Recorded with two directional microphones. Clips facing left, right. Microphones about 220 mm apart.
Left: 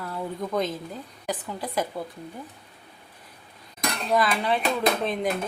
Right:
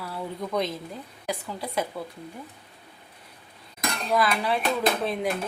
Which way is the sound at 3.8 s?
Centre (ahead or behind).